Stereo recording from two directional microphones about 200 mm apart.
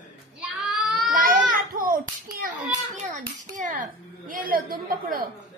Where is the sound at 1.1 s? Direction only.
40° right (ahead or behind).